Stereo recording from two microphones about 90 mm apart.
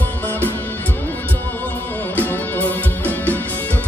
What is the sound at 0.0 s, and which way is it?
Music, 20° left (ahead or behind).